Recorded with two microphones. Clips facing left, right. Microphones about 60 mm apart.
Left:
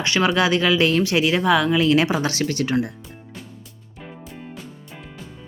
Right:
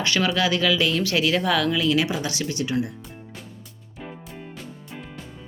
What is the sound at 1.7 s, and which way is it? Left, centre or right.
Speech, left.